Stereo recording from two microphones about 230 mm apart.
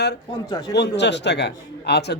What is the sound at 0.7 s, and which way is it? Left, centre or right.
Speech, left.